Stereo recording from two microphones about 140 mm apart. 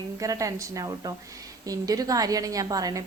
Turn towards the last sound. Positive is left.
turn(degrees=-25)  # may be behind; listen again after turning